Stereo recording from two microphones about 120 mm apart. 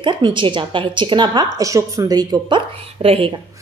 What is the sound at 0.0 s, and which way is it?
A woman's voice, 40° right (ahead or behind).